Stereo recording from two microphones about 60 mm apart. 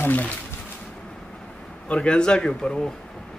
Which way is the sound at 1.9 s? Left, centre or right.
Centre.